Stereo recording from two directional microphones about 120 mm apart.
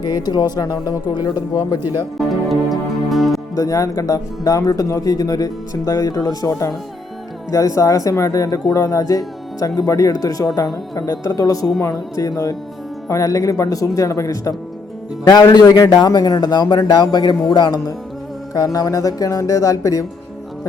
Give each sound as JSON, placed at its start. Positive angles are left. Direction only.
{"t": 0.0, "sound": "a man's voice", "side_deg": 35}
{"t": 2.1, "sound": "music", "side_deg": 0}
{"t": 3.5, "sound": "a man's voice", "side_deg": 25}